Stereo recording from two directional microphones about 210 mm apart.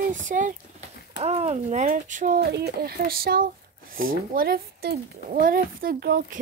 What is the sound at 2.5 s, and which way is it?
Speech, 50° right (ahead or behind).